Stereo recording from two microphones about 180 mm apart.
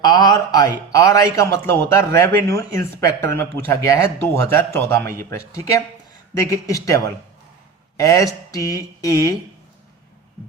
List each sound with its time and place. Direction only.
0.0 s a man's voice: 25° left (ahead or behind)